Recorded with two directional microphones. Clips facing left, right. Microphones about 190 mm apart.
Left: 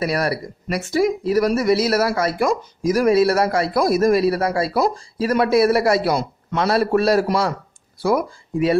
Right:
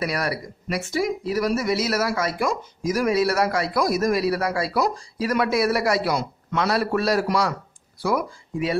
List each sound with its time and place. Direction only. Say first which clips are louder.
0.0 s speech: left 5 dB; 30° left (ahead or behind)
0.7 s speech: left 5 dB; 40° left (ahead or behind)